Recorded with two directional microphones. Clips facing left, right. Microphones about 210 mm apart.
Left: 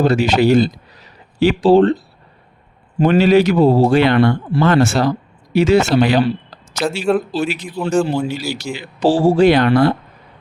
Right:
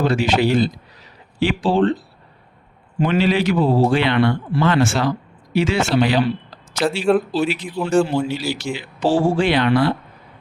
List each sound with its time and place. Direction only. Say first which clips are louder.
0.0 s speech: left 4 dB; 40° left (ahead or behind)
3.0 s speech: left 6 dB; 45° left (ahead or behind)
7.0 s speech: even; centre (ahead or behind)
7.3 s speech: even; 45° left (ahead or behind)
7.9 s speech: even; centre (ahead or behind)
8.3 s speech: even; 45° left (ahead or behind)